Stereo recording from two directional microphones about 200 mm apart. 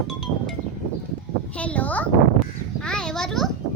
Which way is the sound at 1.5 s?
5° left (ahead or behind).